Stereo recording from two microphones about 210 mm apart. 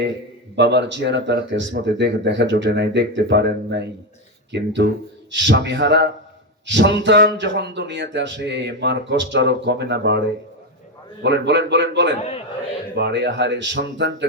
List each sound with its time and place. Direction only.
0.5 s speech: 55° right (ahead or behind)